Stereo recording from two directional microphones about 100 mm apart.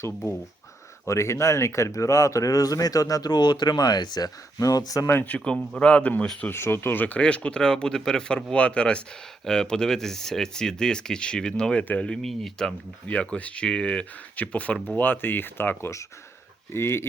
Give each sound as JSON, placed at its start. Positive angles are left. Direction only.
{"t": 1.0, "sound": "speech", "side_deg": 30}
{"t": 5.0, "sound": "speech", "side_deg": 20}
{"t": 6.5, "sound": "speech", "side_deg": 25}